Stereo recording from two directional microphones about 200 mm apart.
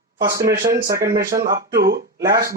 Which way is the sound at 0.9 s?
50° right (ahead or behind).